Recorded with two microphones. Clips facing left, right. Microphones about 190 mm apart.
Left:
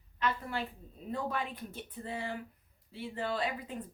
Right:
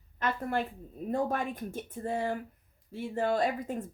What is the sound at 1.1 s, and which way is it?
Speech, 45° right (ahead or behind).